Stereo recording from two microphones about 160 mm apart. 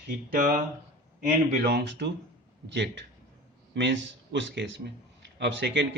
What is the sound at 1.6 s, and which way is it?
Speech, 85° right.